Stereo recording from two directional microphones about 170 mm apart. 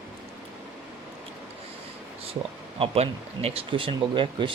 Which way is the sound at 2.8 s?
35° right (ahead or behind).